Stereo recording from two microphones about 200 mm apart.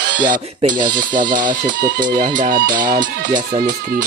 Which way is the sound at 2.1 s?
20° right (ahead or behind).